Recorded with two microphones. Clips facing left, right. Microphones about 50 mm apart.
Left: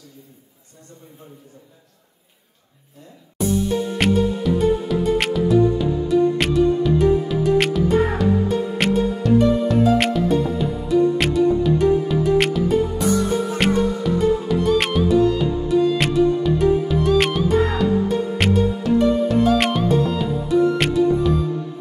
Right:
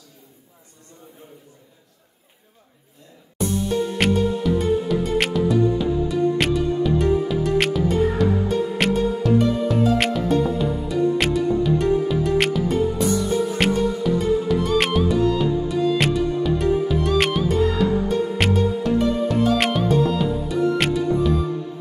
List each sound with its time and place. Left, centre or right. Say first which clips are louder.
3.3 s music: left 2 dB; centre